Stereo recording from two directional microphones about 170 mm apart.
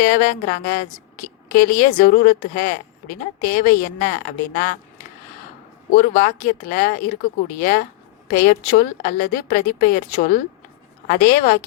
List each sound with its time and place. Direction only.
0.0 s speech: 50° left (ahead or behind)
2.0 s speech: 50° left (ahead or behind)
5.9 s a woman's voice: 50° left (ahead or behind)